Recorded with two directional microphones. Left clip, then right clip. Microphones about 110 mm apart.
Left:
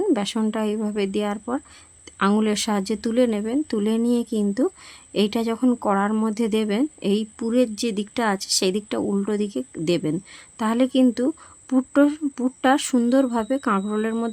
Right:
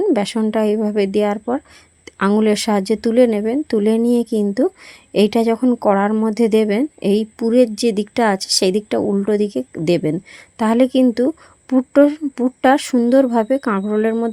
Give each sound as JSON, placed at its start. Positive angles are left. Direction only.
{"t": 0.1, "sound": "a woman's voice", "side_deg": -30}
{"t": 2.0, "sound": "a sound", "side_deg": -35}
{"t": 2.4, "sound": "speech", "side_deg": -30}